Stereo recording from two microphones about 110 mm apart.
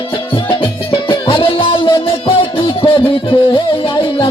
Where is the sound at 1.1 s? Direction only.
55° left (ahead or behind).